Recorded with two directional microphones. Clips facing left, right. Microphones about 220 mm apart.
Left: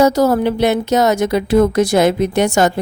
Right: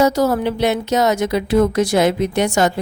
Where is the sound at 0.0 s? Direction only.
45° left (ahead or behind).